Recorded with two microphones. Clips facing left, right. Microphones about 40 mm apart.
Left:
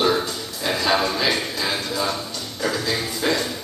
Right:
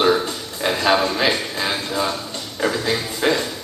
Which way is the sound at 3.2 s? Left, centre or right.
Right.